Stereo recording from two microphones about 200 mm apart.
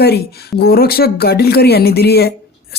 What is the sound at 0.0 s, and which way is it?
A woman's voice, 50° left (ahead or behind).